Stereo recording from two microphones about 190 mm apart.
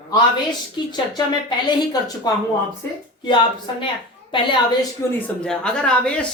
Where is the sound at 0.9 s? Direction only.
20° left (ahead or behind).